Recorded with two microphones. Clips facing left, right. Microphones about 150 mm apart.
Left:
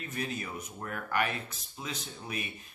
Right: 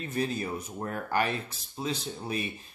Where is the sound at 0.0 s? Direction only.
30° right (ahead or behind).